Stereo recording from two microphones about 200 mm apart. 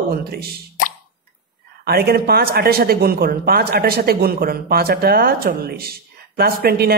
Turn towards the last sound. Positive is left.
turn(degrees=-50)  # may be behind; listen again after turning